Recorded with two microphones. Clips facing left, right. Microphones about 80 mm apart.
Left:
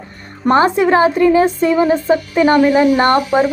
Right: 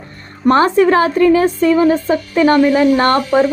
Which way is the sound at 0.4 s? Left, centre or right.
Centre.